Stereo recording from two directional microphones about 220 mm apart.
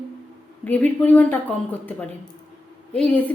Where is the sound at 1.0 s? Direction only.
5° left (ahead or behind).